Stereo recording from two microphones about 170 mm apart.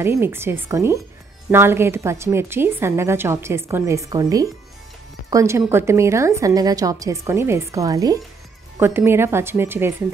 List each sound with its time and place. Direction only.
0.0 s a woman's voice: 15° right (ahead or behind)